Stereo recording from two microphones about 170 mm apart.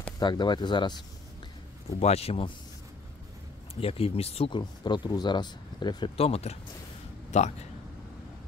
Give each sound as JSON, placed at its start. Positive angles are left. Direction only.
{"t": 0.2, "sound": "speech", "side_deg": 25}
{"t": 2.0, "sound": "a man's voice", "side_deg": 40}
{"t": 3.8, "sound": "speech", "side_deg": 35}